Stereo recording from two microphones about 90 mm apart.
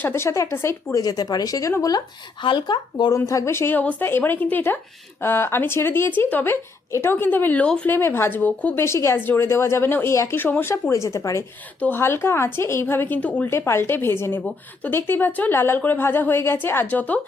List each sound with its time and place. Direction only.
0.0 s a woman's voice: 30° left (ahead or behind)
1.0 s speech: 45° left (ahead or behind)
2.4 s speech: 60° left (ahead or behind)
3.1 s a woman's voice: 35° left (ahead or behind); by 7.9 s 15° left (ahead or behind)
7.9 s a woman's voice: 25° left (ahead or behind)
8.8 s a woman's voice: 30° left (ahead or behind)
11.8 s a woman's voice: 25° left (ahead or behind)
13.5 s a woman's voice: 30° left (ahead or behind)